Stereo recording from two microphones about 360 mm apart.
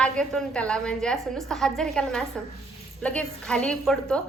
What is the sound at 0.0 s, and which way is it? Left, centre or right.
A woman's voice, centre.